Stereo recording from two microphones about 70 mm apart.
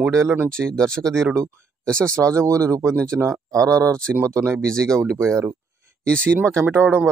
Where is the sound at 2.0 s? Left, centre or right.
Right.